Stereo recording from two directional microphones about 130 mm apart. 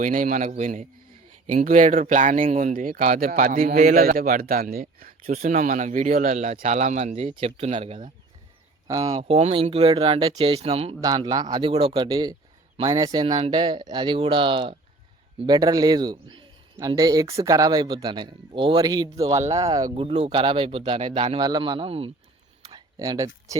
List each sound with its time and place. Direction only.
0.0 s a man's voice: 85° right; by 10.9 s 50° right (ahead or behind)
11.0 s speech: 30° right (ahead or behind)
15.4 s a man's voice: 30° right (ahead or behind)
16.8 s speech: 30° right (ahead or behind)
20.0 s speech: 45° right (ahead or behind)
21.3 s speech: 35° right (ahead or behind)
22.7 s a sound: 25° right (ahead or behind)